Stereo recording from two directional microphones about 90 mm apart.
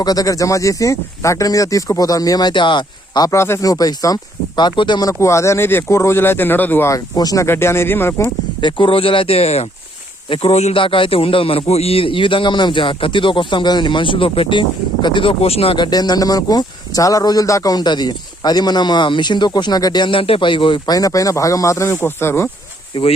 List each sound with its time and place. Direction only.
0.0 s speech: 45° left (ahead or behind); by 3.2 s 60° left (ahead or behind)
3.2 s speech: 30° left (ahead or behind)
3.6 s speech: 40° left (ahead or behind); by 5.0 s 60° left (ahead or behind)
5.0 s speech: 35° left (ahead or behind)
6.9 s speech: 40° left (ahead or behind)
7.4 s speech: 30° left (ahead or behind)
8.6 s a man's voice: 70° left (ahead or behind)
15.9 s speech: 50° left (ahead or behind); by 22.4 s 30° left (ahead or behind)
22.9 s a man's voice: 70° left (ahead or behind)